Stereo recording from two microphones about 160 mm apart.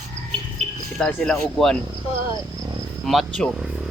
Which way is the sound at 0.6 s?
45° right (ahead or behind).